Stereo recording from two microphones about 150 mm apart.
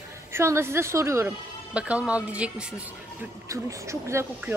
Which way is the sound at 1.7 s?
10° right (ahead or behind).